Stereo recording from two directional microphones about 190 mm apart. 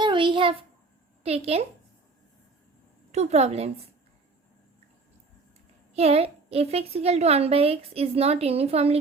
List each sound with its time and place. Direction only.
0.0 s a sound: 25° right (ahead or behind)
1.2 s a woman's voice: 35° right (ahead or behind)
3.1 s a woman's voice: 35° right (ahead or behind)
5.9 s a woman's voice: 35° right (ahead or behind)